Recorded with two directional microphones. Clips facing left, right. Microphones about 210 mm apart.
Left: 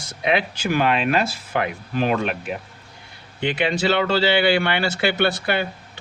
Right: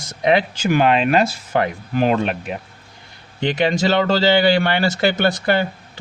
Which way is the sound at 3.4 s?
45° right (ahead or behind).